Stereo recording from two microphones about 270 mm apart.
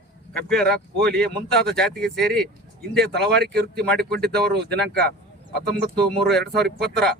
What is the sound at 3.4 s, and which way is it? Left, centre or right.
Speech, right.